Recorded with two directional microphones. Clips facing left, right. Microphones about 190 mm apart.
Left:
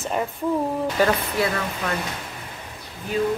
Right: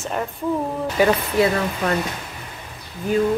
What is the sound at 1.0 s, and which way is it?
Speech, 10° right (ahead or behind).